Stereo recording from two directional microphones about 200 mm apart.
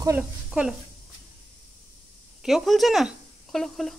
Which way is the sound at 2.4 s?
Centre (ahead or behind).